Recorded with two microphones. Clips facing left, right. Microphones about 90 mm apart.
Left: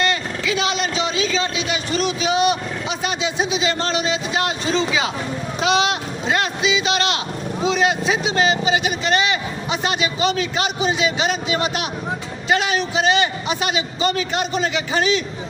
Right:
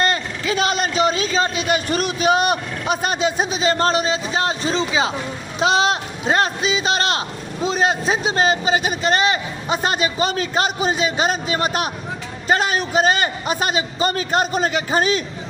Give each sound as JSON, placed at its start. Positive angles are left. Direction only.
{"t": 0.0, "sound": "a man's voice", "side_deg": -40}